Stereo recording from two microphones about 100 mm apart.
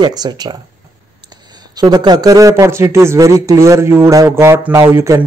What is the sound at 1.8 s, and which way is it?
Speech, 45° right (ahead or behind).